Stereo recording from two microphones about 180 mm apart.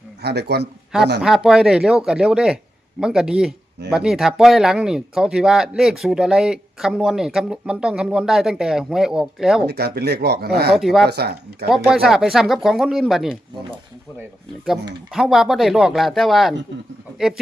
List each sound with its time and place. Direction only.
0.2 s speech: 65° right (ahead or behind)
1.2 s speech: centre (ahead or behind)
9.6 s speech: 60° right (ahead or behind)
10.8 s speech: centre (ahead or behind)
11.1 s speech: 60° right (ahead or behind)
11.8 s speech: 5° right (ahead or behind)
15.1 s speech: centre (ahead or behind)